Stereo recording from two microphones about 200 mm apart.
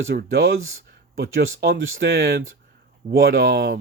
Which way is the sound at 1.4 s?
75° right (ahead or behind).